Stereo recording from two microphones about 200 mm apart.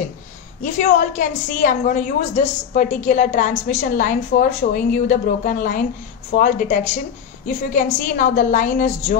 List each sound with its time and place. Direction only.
0.6 s a woman's voice: 40° left (ahead or behind)